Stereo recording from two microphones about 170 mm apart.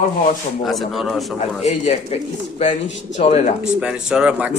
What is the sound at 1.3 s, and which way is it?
Speech, 40° left (ahead or behind).